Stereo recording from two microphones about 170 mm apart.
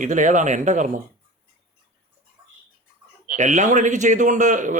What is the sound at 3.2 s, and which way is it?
Speech, 45° right (ahead or behind).